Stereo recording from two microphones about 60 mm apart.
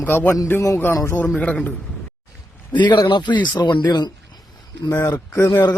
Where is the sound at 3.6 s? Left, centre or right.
Left.